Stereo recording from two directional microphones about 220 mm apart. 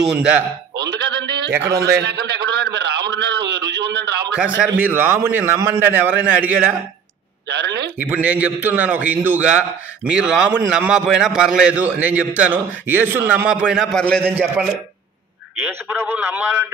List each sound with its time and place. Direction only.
0.0 s a man's voice: 5° right (ahead or behind)
1.0 s bleat: 50° right (ahead or behind)
1.7 s a sound: 45° right (ahead or behind)
4.6 s a man's voice: 10° right (ahead or behind)
7.4 s speech: 50° right (ahead or behind)
8.0 s a man's voice: 5° right (ahead or behind)